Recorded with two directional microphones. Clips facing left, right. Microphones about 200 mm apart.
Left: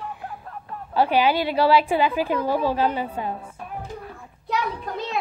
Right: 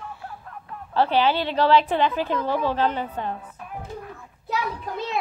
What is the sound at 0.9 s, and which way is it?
A woman's voice, 10° left (ahead or behind).